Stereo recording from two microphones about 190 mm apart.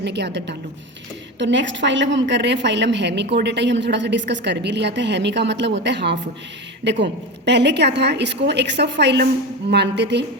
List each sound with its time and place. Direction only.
0.0 s a woman's voice: 65° right (ahead or behind)